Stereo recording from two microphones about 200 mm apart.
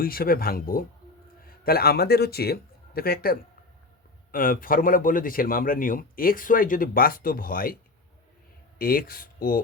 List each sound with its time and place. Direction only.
0.0 s a man's voice: 45° left (ahead or behind)
8.8 s a man's voice: 45° left (ahead or behind)